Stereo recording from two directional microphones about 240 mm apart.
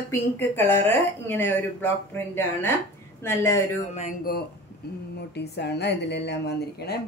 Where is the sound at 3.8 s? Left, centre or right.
Left.